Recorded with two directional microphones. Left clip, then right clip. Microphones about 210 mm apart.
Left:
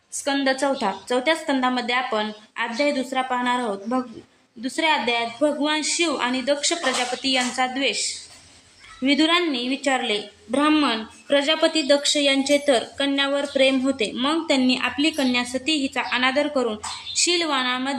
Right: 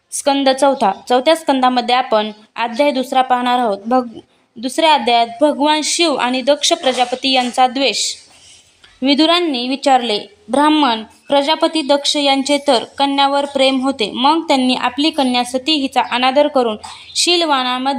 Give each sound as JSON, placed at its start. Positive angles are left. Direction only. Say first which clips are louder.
{"t": 0.2, "sound": "a woman's voice", "louder": "right 9 dB", "side_deg": -40}